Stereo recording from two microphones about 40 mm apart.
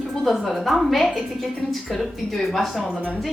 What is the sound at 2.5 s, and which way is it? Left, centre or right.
Speech, centre.